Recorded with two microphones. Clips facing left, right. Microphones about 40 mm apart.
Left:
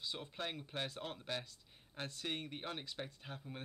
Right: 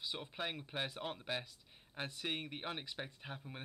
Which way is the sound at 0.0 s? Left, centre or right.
Centre.